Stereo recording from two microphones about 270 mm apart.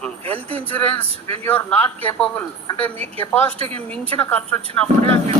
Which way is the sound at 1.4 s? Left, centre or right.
Centre.